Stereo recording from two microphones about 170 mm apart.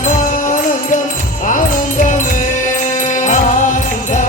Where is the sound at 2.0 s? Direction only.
50° left (ahead or behind).